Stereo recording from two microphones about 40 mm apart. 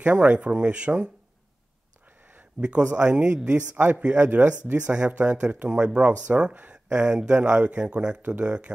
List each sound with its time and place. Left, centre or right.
0.0 s speech: right
2.6 s speech: right
3.7 s a man's voice: right
5.7 s speech: right